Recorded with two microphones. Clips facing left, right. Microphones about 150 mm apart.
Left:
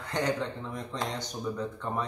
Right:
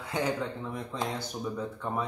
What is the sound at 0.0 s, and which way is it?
Speech, 5° right (ahead or behind).